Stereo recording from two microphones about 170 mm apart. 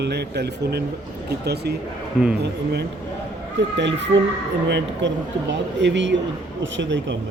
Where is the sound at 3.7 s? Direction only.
90° right.